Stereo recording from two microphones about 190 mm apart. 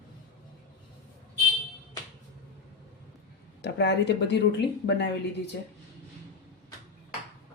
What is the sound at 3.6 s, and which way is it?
Speech, 65° left (ahead or behind).